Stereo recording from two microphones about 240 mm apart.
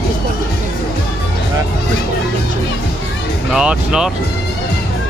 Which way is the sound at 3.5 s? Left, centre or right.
Centre.